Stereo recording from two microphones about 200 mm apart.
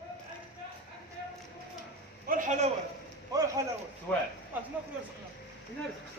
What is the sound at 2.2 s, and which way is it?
Speech, 40° right (ahead or behind).